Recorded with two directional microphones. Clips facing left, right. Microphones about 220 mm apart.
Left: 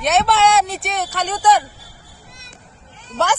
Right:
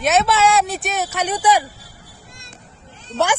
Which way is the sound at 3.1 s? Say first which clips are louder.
Right 1 dB; 30° right (ahead or behind).